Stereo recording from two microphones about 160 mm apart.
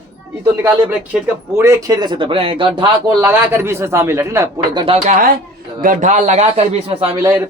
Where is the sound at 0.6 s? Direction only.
10° right (ahead or behind); by 2.9 s 35° right (ahead or behind).